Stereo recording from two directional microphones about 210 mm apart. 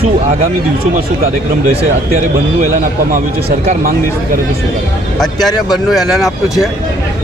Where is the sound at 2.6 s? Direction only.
40° right (ahead or behind).